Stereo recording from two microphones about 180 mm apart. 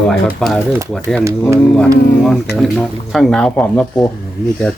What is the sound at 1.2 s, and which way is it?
Speech, 15° right (ahead or behind).